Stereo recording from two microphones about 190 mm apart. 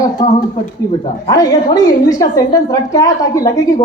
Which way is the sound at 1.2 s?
20° left (ahead or behind).